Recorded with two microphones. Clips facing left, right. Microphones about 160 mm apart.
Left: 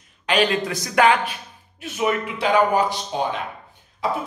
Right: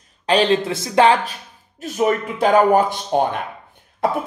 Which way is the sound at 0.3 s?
30° right (ahead or behind).